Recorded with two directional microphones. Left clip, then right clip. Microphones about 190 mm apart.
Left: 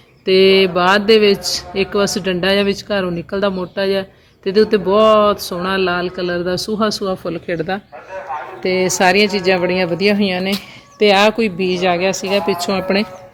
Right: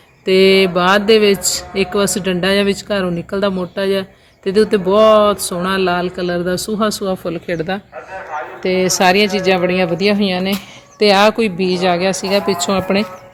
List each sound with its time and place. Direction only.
0.3 s speech: 5° left (ahead or behind)
9.2 s speech: 40° right (ahead or behind)
9.5 s speech: 5° left (ahead or behind)